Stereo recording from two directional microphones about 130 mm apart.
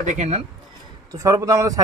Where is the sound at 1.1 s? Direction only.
25° right (ahead or behind).